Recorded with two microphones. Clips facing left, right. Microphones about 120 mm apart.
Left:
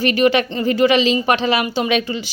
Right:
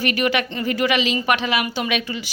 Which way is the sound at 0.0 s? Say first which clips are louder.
Left 6 dB; 30° left (ahead or behind).